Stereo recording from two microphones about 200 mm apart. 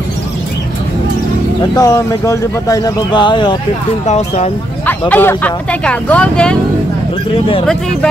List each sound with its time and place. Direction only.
1.8 s speech: 15° left (ahead or behind)
4.0 s speech: 35° left (ahead or behind)
4.8 s speech: 10° left (ahead or behind)